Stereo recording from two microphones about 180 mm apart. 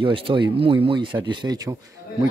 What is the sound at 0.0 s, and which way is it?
Speech, 30° right (ahead or behind).